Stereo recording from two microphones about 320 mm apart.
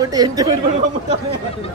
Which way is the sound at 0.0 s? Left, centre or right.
Centre.